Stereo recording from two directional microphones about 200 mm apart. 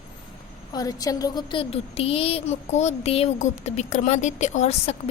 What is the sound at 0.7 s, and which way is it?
A woman's voice, 20° left (ahead or behind).